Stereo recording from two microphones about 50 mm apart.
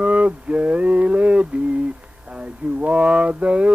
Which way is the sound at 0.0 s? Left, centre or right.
Right.